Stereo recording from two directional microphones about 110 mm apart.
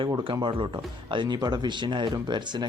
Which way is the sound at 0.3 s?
50° right (ahead or behind).